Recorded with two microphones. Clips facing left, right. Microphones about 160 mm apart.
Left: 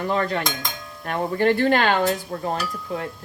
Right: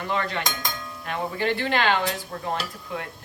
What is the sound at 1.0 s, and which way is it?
Speech, 45° left (ahead or behind).